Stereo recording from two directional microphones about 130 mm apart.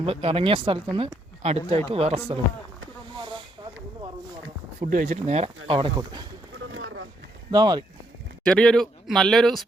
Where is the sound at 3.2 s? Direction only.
40° right (ahead or behind).